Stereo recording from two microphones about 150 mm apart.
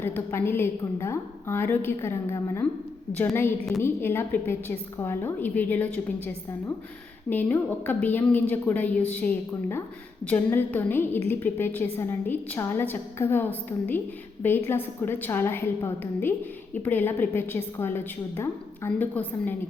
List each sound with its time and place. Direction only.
0.0 s a woman's voice: 15° left (ahead or behind)
3.8 s a woman's voice: 15° left (ahead or behind)